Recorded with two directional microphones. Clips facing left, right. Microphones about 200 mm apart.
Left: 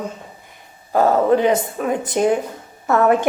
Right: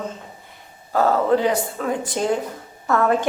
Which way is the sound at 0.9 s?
20° left (ahead or behind).